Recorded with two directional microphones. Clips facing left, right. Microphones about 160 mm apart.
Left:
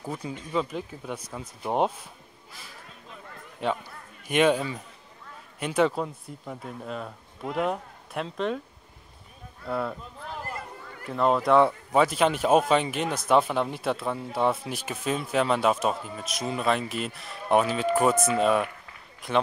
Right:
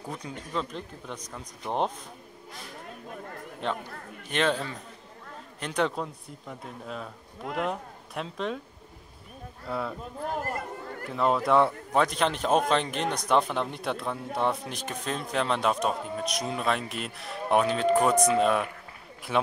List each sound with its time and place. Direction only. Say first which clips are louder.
0.5 s speech: left 4 dB; 5° left (ahead or behind)
2.9 s a sound: right 7 dB; 50° right (ahead or behind)
3.6 s speech: left 3 dB; 5° left (ahead or behind)
9.7 s speech: left 3 dB; centre (ahead or behind)
10.2 s chatter: right 5 dB; 45° right (ahead or behind)
11.1 s speech: left 2 dB; centre (ahead or behind)